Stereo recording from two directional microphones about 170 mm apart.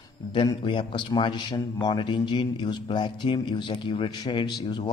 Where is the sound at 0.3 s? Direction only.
30° left (ahead or behind).